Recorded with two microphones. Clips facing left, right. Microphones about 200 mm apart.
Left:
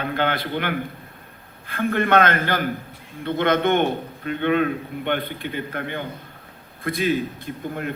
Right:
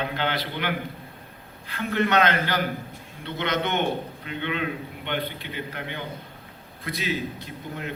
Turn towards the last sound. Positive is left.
turn(degrees=50)  # may be behind; listen again after turning